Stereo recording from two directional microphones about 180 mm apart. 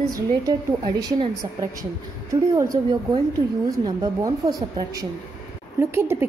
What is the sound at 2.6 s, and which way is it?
A woman's voice, 20° right (ahead or behind).